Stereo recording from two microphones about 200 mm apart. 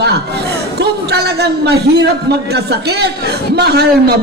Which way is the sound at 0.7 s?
55° right (ahead or behind).